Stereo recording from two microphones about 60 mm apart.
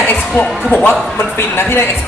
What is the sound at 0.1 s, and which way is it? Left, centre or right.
Speech, left.